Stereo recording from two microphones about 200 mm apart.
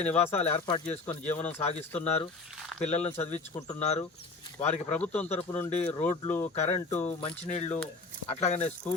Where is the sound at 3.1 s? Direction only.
35° left (ahead or behind).